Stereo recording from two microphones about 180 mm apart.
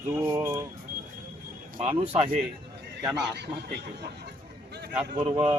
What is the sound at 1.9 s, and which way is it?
Speech, 35° right (ahead or behind).